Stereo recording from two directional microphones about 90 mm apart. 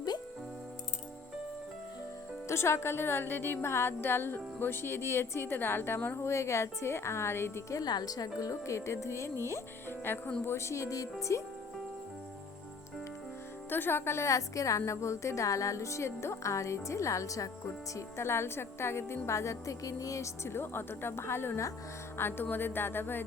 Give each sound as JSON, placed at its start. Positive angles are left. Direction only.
{"t": 2.5, "sound": "speech", "side_deg": 30}
{"t": 7.8, "sound": "a woman's voice", "side_deg": 50}
{"t": 13.7, "sound": "a woman's voice", "side_deg": 25}